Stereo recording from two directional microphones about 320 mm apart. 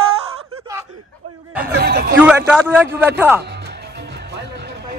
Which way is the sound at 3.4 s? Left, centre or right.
Right.